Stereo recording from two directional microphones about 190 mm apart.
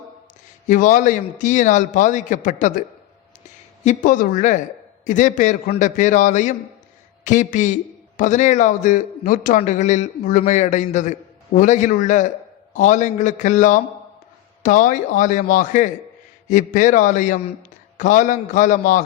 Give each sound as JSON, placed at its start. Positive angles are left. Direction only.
{"t": 0.7, "sound": "a man's voice", "side_deg": 45}
{"t": 3.8, "sound": "a man's voice", "side_deg": 45}